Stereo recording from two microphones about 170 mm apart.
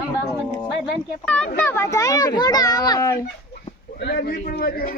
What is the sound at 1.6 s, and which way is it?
A child's voice, 15° left (ahead or behind).